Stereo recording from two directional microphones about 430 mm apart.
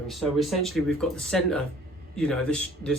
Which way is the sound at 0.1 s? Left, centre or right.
Centre.